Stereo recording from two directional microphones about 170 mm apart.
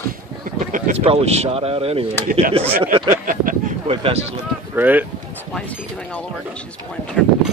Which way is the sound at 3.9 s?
35° right (ahead or behind).